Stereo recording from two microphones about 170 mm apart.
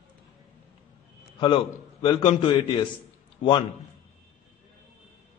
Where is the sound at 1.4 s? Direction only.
30° left (ahead or behind).